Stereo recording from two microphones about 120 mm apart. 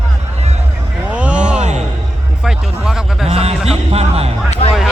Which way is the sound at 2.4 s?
5° right (ahead or behind).